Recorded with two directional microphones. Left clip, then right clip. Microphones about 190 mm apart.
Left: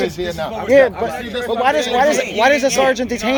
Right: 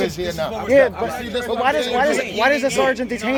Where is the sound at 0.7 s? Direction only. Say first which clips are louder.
Left 3 dB; 15° left (ahead or behind).